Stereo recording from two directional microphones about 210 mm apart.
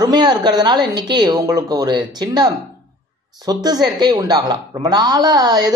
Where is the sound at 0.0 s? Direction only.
20° right (ahead or behind).